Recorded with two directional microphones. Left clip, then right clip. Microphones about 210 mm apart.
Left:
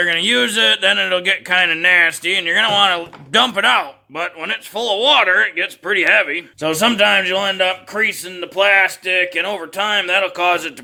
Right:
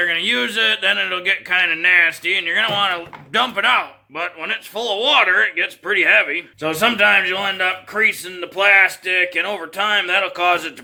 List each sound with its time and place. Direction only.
0.0 s speech: 55° left (ahead or behind)